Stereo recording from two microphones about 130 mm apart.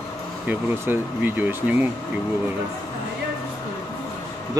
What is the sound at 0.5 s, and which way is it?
Speech, 15° right (ahead or behind).